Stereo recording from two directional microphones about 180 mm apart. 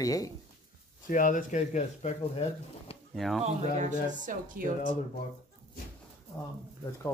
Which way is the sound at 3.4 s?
40° right (ahead or behind).